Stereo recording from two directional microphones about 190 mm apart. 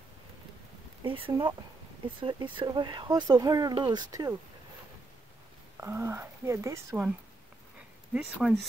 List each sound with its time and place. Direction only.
1.0 s speech: 25° right (ahead or behind)
5.8 s speech: 15° right (ahead or behind)
8.1 s speech: 5° right (ahead or behind)